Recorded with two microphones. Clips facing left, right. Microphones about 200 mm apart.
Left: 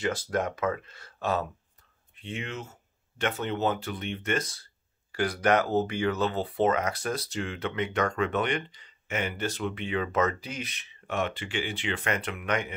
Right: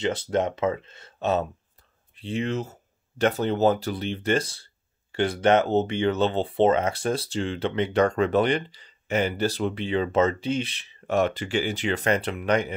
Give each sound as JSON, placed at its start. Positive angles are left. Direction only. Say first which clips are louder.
{"t": 0.0, "sound": "speech", "louder": "right 4 dB", "side_deg": -25}